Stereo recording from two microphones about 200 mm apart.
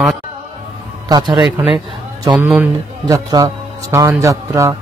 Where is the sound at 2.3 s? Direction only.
5° right (ahead or behind).